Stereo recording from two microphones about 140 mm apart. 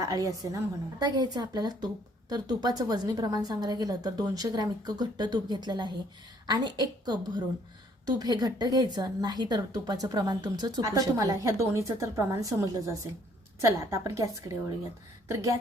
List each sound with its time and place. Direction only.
0.0 s a woman's voice: 25° right (ahead or behind)